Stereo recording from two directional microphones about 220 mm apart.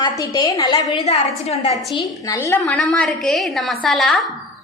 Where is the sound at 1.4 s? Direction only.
30° left (ahead or behind).